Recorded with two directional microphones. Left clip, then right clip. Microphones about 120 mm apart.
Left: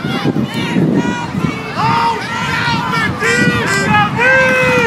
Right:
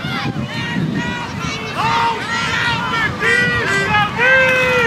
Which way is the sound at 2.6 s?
25° left (ahead or behind).